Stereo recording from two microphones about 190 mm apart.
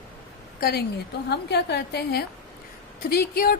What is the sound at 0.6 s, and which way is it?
A woman's voice, 55° left (ahead or behind).